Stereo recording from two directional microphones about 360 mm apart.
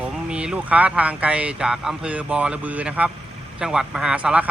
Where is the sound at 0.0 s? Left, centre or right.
Centre.